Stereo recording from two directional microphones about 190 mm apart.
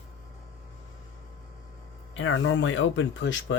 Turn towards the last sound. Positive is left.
turn(degrees=80)